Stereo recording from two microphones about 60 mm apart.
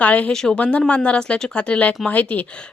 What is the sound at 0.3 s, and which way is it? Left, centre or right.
Speech, centre.